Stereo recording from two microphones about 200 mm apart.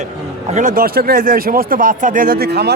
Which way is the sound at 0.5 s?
40° right (ahead or behind).